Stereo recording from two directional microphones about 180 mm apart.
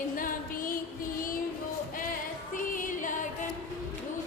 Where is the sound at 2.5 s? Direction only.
45° left (ahead or behind).